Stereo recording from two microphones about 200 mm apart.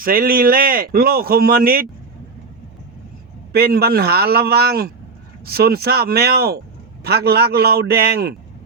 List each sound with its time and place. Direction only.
0.0 s speech: 45° right (ahead or behind)
3.5 s speech: 50° right (ahead or behind)